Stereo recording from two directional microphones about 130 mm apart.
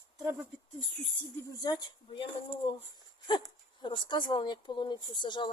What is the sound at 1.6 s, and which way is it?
Speech, 35° left (ahead or behind).